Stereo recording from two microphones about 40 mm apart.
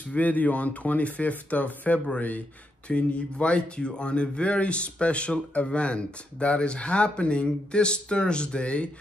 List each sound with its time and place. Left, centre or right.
0.1 s speech: left